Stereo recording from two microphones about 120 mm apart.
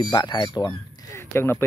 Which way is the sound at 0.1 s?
35° left (ahead or behind).